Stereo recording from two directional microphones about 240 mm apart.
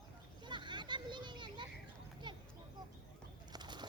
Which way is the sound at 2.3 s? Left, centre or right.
Centre.